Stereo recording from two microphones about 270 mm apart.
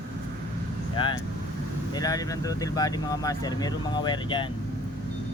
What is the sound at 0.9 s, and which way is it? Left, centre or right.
Speech, centre.